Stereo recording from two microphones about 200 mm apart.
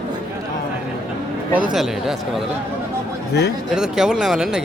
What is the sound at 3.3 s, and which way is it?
Speech, 55° left (ahead or behind).